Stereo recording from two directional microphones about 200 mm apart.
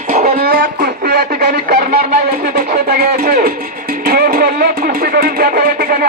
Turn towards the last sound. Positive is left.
turn(degrees=-50)  # may be behind; listen again after turning